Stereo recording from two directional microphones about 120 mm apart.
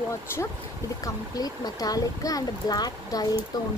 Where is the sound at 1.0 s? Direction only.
30° left (ahead or behind).